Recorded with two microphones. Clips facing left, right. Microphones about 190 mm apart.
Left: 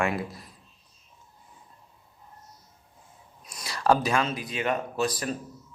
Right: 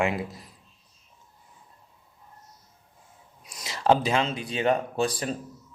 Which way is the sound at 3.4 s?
20° right (ahead or behind).